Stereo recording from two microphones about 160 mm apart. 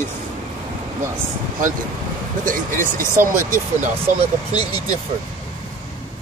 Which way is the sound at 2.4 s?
55° right (ahead or behind).